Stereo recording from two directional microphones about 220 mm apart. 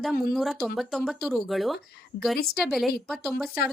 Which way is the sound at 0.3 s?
Centre (ahead or behind).